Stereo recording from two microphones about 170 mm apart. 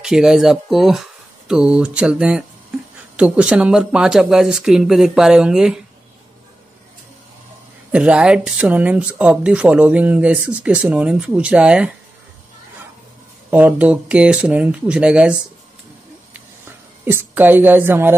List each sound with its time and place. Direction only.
0.0 s speech: 5° right (ahead or behind)
7.9 s speech: 5° right (ahead or behind)
13.5 s speech: 10° right (ahead or behind)
17.0 s speech: 15° right (ahead or behind)